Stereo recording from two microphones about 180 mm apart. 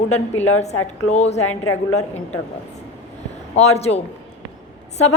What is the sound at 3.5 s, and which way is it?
Speech, 35° left (ahead or behind).